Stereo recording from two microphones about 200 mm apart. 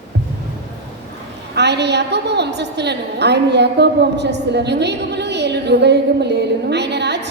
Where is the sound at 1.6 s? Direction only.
60° right (ahead or behind).